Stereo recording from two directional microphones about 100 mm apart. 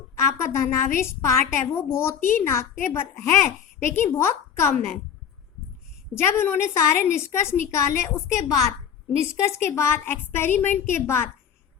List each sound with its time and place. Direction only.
0.2 s a woman's voice: 30° left (ahead or behind)
6.1 s a woman's voice: 25° left (ahead or behind)